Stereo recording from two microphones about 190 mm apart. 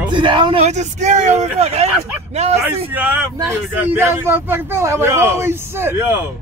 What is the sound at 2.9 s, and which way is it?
Speech, 10° right (ahead or behind).